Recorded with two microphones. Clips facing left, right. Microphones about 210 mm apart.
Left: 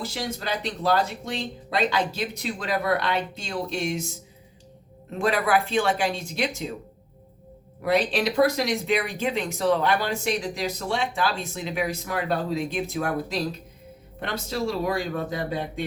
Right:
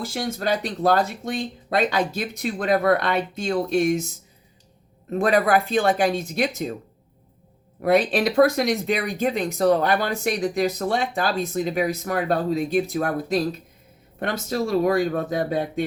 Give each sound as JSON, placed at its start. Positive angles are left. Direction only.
{"t": 0.0, "sound": "speech", "side_deg": -50}
{"t": 5.2, "sound": "speech", "side_deg": -50}
{"t": 7.8, "sound": "speech", "side_deg": -50}
{"t": 14.2, "sound": "speech", "side_deg": -50}